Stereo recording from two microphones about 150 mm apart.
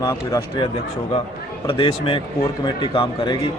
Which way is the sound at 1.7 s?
40° left (ahead or behind).